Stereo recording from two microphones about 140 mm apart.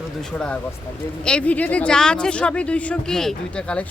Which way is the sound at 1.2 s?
10° left (ahead or behind).